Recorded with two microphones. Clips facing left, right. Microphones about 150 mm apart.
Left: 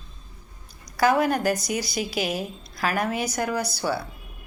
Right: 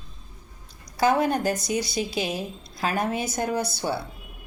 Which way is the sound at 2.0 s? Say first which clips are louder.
Even; 10° left (ahead or behind).